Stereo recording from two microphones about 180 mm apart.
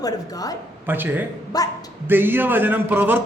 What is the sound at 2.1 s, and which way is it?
A man's voice, 10° right (ahead or behind).